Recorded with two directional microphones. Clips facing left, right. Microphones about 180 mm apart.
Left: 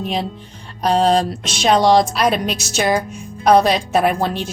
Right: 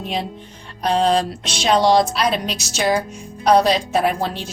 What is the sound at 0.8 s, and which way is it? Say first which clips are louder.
A woman's voice: left 2 dB; 40° left (ahead or behind).